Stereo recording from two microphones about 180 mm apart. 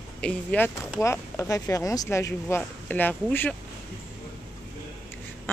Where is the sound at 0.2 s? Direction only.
5° left (ahead or behind).